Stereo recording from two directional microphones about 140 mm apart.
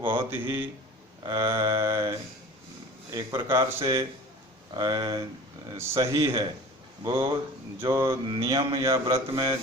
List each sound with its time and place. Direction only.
0.1 s mantra: 15° right (ahead or behind)
3.1 s speech: 20° right (ahead or behind)
7.0 s mantra: 20° right (ahead or behind)
8.8 s speech: 20° right (ahead or behind)